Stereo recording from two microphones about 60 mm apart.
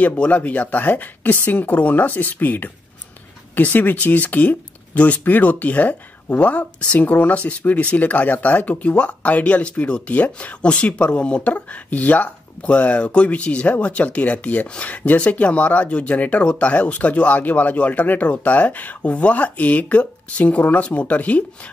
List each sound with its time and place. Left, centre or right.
0.0 s speech: left